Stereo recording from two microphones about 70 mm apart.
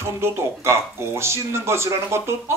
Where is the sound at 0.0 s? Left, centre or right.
Right.